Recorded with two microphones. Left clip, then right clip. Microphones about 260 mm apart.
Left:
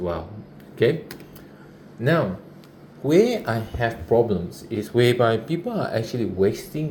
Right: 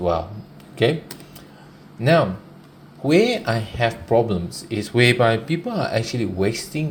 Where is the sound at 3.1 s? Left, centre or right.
Right.